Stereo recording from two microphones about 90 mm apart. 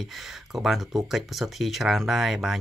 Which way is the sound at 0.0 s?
Centre (ahead or behind).